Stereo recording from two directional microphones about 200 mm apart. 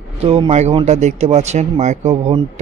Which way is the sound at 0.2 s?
30° right (ahead or behind).